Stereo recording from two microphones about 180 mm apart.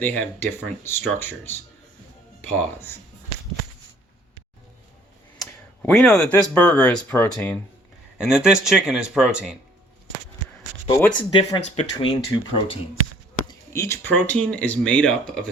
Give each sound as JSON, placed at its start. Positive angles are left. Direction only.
{"t": 0.0, "sound": "speech", "side_deg": 10}
{"t": 5.5, "sound": "speech", "side_deg": 5}
{"t": 8.2, "sound": "speech", "side_deg": -5}
{"t": 11.2, "sound": "speech", "side_deg": 25}
{"t": 13.5, "sound": "speech", "side_deg": 15}